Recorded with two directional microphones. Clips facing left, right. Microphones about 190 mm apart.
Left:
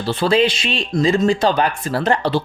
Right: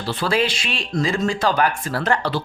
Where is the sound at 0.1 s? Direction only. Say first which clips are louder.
Left 5 dB; 25° left (ahead or behind).